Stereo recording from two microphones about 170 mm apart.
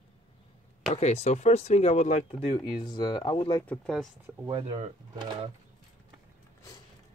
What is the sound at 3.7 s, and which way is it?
Speech, 5° left (ahead or behind).